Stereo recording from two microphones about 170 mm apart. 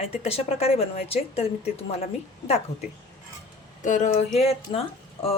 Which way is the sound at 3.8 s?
45° left (ahead or behind).